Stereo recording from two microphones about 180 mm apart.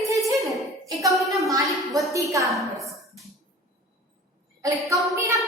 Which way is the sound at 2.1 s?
15° right (ahead or behind).